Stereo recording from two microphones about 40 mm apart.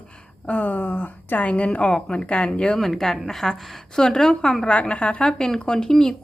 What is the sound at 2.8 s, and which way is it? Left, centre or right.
Speech, centre.